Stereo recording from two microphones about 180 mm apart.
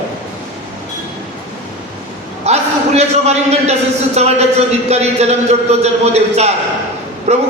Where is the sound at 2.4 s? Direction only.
35° right (ahead or behind).